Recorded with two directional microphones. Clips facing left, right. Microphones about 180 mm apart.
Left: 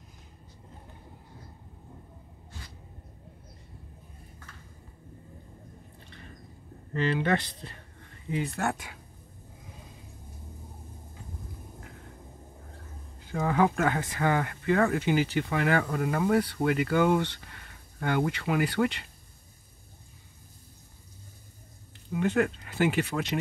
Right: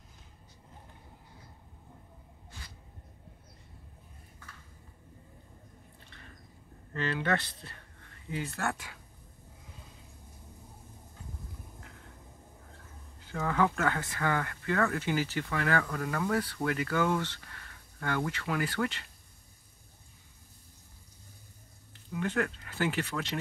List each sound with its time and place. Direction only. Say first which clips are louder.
6.9 s speech: left 4 dB; 20° left (ahead or behind)
13.3 s speech: left 4 dB; 15° left (ahead or behind)
22.1 s speech: left 6 dB; 20° left (ahead or behind)